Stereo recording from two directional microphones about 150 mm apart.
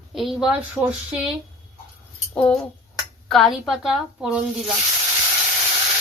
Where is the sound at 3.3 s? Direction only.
Centre (ahead or behind).